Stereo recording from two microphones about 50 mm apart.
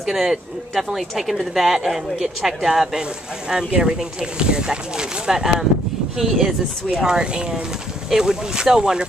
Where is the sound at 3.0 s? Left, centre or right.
Centre.